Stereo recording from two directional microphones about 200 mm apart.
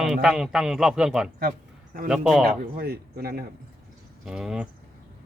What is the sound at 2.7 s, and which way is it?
Speech, 50° right (ahead or behind).